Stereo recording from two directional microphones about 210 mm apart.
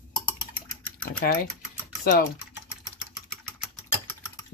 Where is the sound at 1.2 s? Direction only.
45° left (ahead or behind).